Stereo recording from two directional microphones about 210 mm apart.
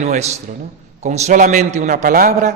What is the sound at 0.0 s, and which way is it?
A man's voice, 30° right (ahead or behind).